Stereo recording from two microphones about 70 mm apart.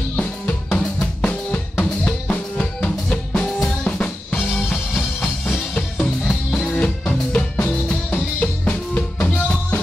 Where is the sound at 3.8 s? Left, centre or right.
Centre.